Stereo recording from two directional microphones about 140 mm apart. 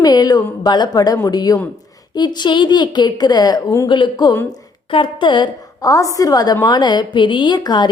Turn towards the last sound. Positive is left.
turn(degrees=30)  # may be behind; listen again after turning